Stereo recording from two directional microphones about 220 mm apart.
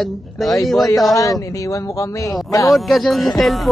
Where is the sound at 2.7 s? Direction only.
Centre (ahead or behind).